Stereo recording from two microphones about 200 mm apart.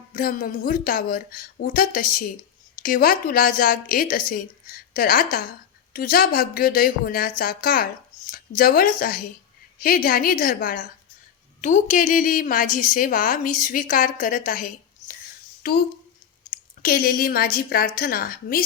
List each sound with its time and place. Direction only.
0.1 s a woman's voice: 45° left (ahead or behind)
16.8 s speech: 45° left (ahead or behind)